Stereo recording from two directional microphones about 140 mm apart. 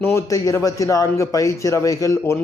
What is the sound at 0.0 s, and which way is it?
A man's voice, 20° left (ahead or behind).